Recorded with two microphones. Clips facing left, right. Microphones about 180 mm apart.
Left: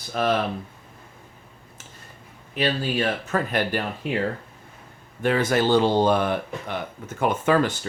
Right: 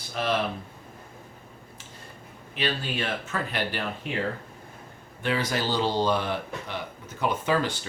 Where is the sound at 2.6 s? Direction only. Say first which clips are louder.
Left 6 dB; 40° left (ahead or behind).